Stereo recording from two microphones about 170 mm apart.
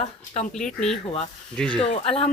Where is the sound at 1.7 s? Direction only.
35° left (ahead or behind).